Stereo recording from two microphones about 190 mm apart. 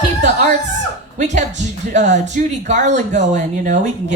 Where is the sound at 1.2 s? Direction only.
40° right (ahead or behind).